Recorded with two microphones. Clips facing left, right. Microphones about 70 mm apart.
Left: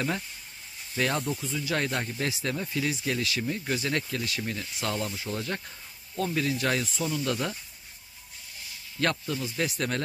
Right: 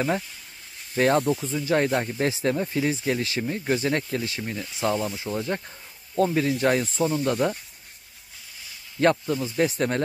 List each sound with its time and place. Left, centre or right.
0.9 s speech: right
9.0 s speech: right